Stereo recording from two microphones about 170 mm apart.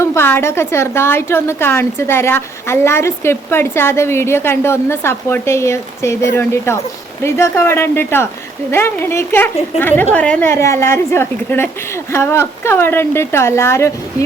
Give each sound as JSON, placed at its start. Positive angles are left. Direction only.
{"t": 0.0, "sound": "a woman's voice", "side_deg": 15}